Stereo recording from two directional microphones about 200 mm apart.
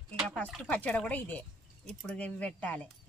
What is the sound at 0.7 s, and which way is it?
Speech, 5° left (ahead or behind).